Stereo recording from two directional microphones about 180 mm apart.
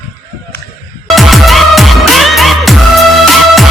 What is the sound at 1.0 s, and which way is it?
Music, centre (ahead or behind).